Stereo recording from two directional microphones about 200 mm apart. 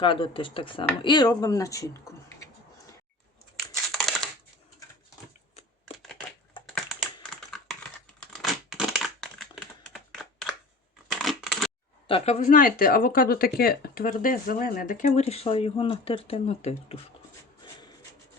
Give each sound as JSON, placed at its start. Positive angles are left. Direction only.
{"t": 0.0, "sound": "speech", "side_deg": 25}
{"t": 3.8, "sound": "typing", "side_deg": 0}
{"t": 6.0, "sound": "a sound", "side_deg": 5}
{"t": 7.3, "sound": "computer keyboard", "side_deg": 0}
{"t": 8.2, "sound": "typing", "side_deg": 0}
{"t": 11.1, "sound": "a sound", "side_deg": 0}
{"t": 12.0, "sound": "speech", "side_deg": 30}